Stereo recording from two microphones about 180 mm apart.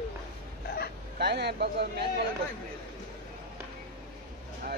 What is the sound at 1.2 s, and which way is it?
Speech, 65° right (ahead or behind).